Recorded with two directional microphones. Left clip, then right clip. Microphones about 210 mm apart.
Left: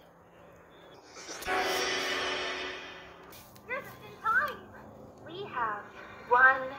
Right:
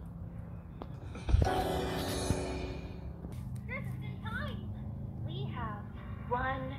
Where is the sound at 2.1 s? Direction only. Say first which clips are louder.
Left 5 dB; 15° right (ahead or behind).